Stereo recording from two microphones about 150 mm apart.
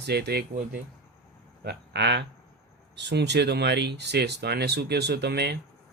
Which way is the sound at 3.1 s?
90° right.